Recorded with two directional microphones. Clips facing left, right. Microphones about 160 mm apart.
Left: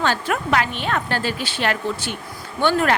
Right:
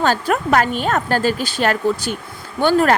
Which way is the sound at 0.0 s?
40° right (ahead or behind).